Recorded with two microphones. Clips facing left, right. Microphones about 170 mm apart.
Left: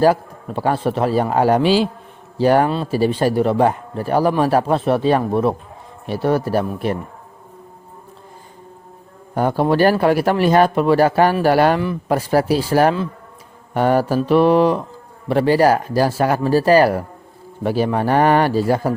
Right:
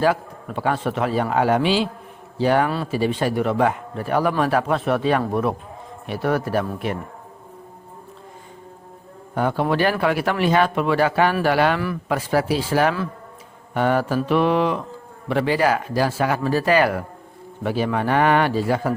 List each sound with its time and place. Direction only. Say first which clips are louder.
0.0 s speech: left 5 dB; 40° left (ahead or behind)
2.6 s a man's voice: left 4 dB; 25° left (ahead or behind)
2.9 s a man's voice: left 4 dB; 35° left (ahead or behind)
9.3 s speech: left 4 dB; 40° left (ahead or behind)